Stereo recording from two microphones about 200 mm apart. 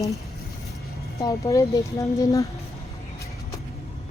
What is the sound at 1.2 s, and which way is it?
A woman's voice, 15° left (ahead or behind).